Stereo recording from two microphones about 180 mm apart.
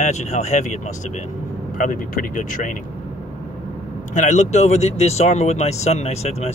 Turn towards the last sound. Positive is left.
turn(degrees=35)  # may be behind; listen again after turning